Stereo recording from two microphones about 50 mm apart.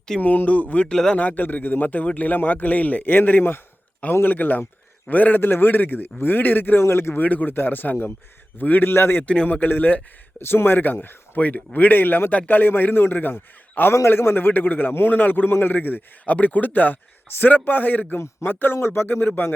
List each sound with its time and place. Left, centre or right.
0.2 s a man's voice: left
0.9 s speech: centre
1.1 s a man's voice: left
6.8 s speech: left
7.2 s a man's voice: left
9.2 s a man's voice: left
10.4 s speech: left
11.3 s a man's voice: left
15.4 s a man's voice: left
17.2 s a man's voice: left
17.5 s a man's voice: left